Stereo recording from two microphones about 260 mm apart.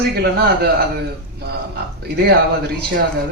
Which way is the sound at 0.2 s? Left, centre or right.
Right.